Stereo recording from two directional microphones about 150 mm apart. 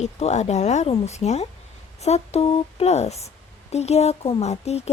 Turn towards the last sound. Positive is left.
turn(degrees=45)  # may be behind; listen again after turning